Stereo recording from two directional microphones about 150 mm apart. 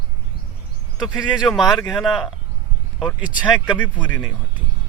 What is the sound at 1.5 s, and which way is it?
Speech, 5° left (ahead or behind).